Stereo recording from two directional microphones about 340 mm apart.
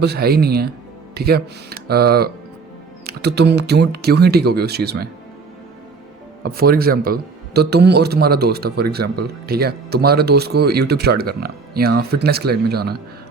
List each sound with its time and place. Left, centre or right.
0.0 s a man's voice: right
6.4 s a man's voice: right